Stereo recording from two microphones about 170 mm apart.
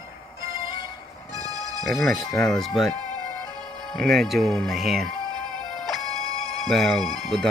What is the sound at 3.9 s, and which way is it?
Speech, centre (ahead or behind).